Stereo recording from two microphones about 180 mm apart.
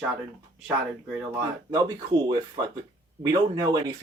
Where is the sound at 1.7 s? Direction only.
25° right (ahead or behind).